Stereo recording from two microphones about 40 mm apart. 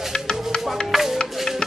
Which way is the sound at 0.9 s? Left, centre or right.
Centre.